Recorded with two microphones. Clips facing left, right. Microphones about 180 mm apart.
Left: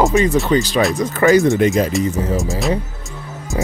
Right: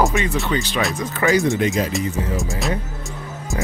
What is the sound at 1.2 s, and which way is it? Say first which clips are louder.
Speech: left 6 dB; 45° left (ahead or behind).